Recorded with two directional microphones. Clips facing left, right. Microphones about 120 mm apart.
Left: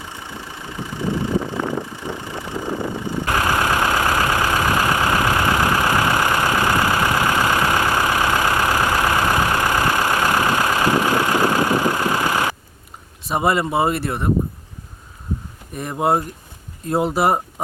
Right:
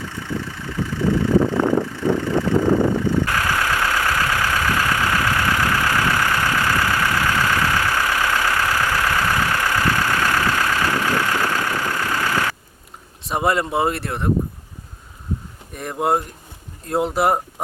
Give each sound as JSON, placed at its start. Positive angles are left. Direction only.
{"t": 0.0, "sound": "vehicle", "side_deg": 15}
{"t": 1.5, "sound": "vehicle", "side_deg": -55}
{"t": 1.8, "sound": "vehicle", "side_deg": 15}
{"t": 13.2, "sound": "speech", "side_deg": 0}
{"t": 15.7, "sound": "speech", "side_deg": 0}